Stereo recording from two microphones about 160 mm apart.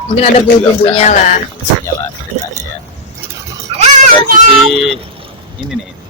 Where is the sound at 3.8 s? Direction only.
50° right (ahead or behind).